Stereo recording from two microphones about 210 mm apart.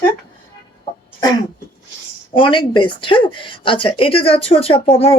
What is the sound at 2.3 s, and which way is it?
Speech, 25° left (ahead or behind).